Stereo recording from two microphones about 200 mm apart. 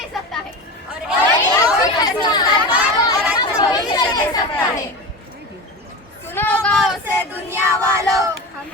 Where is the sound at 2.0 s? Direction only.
20° left (ahead or behind).